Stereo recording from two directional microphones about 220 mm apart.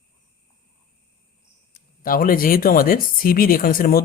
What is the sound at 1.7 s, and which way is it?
Speech, 40° left (ahead or behind).